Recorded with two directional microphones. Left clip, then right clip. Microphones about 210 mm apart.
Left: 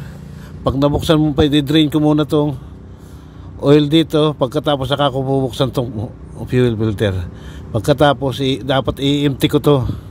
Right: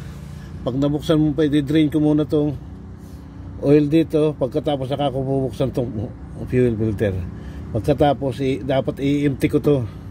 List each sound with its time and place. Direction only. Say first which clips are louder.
0.7 s a man's voice: left 5 dB; 30° left (ahead or behind)
3.6 s a man's voice: left 4 dB; 30° left (ahead or behind)